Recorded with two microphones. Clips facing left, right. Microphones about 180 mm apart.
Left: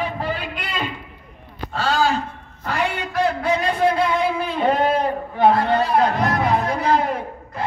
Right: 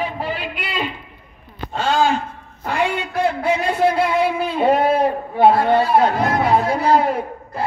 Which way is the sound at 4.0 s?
10° right (ahead or behind).